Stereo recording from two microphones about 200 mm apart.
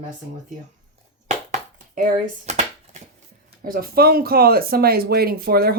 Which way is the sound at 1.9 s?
40° right (ahead or behind).